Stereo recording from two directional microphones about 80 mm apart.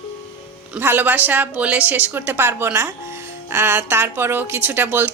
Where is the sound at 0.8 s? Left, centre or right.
Right.